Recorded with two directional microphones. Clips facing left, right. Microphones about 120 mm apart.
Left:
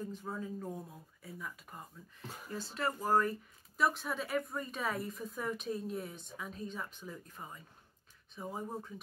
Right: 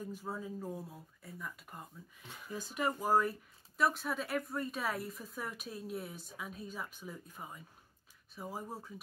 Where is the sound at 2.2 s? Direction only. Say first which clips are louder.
Left 5 dB; 40° left (ahead or behind).